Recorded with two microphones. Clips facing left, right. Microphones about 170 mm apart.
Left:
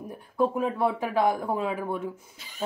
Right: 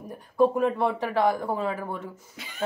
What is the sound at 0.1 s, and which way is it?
Speech, 5° left (ahead or behind).